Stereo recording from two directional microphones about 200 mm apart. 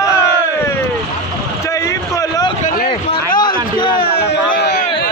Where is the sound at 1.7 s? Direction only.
15° left (ahead or behind).